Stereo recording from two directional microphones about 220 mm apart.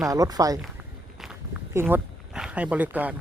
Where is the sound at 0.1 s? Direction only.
15° right (ahead or behind).